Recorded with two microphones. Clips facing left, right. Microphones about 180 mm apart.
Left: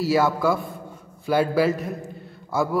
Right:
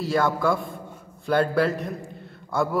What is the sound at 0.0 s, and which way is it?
A man's voice, 5° left (ahead or behind).